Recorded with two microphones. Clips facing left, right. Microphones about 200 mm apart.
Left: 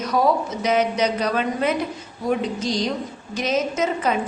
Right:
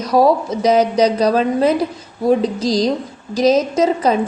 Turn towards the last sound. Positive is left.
turn(degrees=-35)  # may be behind; listen again after turning